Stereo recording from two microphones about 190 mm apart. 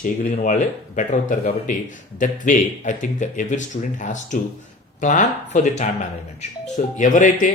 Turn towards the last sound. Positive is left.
turn(degrees=45)  # may be behind; listen again after turning